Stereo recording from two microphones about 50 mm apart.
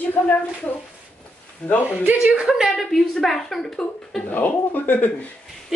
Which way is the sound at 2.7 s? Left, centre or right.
Centre.